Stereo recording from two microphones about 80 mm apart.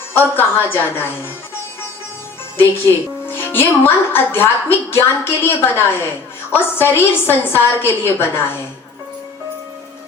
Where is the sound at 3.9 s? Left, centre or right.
Left.